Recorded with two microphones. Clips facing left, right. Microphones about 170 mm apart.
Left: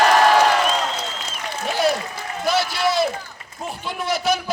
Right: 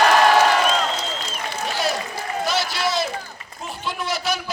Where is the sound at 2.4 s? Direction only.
55° left (ahead or behind).